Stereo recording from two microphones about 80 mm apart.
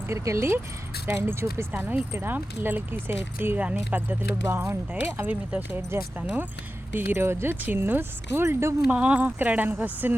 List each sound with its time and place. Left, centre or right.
0.1 s speech: right
8.9 s speech: centre